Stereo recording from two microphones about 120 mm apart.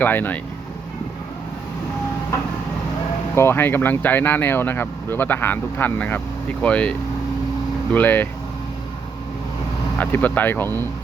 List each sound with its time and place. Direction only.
0.0 s speech: 15° left (ahead or behind)
3.3 s speech: 20° left (ahead or behind)
7.9 s speech: 15° left (ahead or behind)
10.0 s speech: 15° left (ahead or behind)